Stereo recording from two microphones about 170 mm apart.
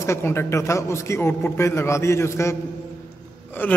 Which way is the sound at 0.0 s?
15° left (ahead or behind).